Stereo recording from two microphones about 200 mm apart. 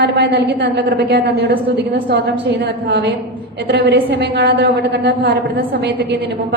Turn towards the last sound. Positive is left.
turn(degrees=-60)  # may be behind; listen again after turning